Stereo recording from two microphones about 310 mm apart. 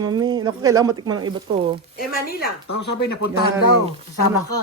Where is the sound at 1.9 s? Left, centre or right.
Left.